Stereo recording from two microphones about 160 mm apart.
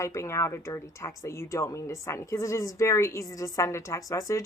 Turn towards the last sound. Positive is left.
turn(degrees=20)  # may be behind; listen again after turning